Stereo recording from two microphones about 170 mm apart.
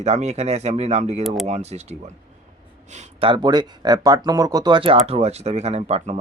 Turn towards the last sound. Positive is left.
turn(degrees=-40)  # may be behind; listen again after turning